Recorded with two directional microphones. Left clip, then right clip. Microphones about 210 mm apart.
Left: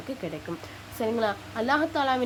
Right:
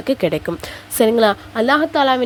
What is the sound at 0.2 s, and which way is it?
A woman's voice, 45° right (ahead or behind).